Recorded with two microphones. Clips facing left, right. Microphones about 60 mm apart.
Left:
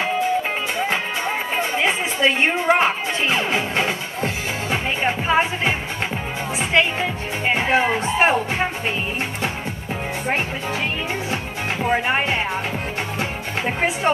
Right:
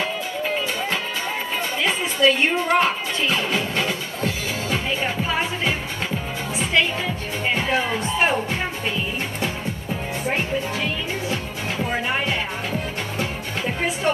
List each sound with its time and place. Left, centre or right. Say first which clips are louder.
1.6 s music: left 3 dB; left
7.4 s speech: left 4 dB; left
10.2 s speech: even; left
11.8 s music: left 4 dB; left